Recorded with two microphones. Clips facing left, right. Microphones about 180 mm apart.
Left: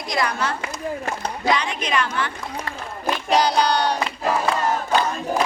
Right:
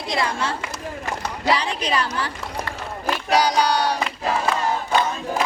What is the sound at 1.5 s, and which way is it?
Speech, 35° right (ahead or behind).